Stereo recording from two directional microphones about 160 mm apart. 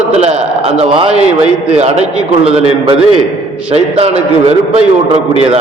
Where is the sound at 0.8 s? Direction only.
40° right (ahead or behind).